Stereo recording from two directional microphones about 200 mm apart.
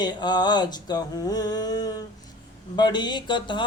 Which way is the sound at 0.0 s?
20° left (ahead or behind).